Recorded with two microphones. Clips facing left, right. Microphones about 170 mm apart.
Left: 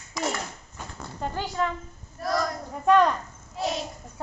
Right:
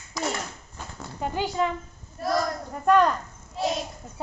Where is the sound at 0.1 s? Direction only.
Centre (ahead or behind).